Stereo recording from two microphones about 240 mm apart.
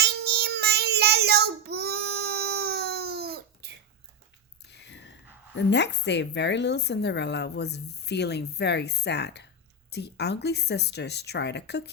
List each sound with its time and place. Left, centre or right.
0.0 s child singing: right
4.7 s a sound: left
5.5 s a woman's voice: left